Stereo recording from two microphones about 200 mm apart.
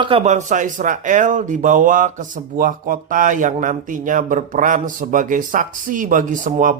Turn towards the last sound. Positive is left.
turn(degrees=-40)  # may be behind; listen again after turning